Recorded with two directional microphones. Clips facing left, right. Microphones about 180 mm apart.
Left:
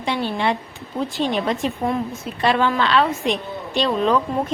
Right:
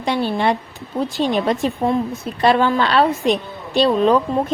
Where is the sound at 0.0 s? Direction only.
40° right (ahead or behind).